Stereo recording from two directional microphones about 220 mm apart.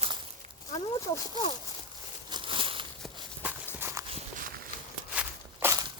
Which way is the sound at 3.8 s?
10° right (ahead or behind).